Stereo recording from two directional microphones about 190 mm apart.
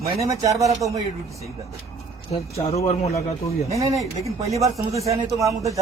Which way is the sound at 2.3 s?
30° left (ahead or behind).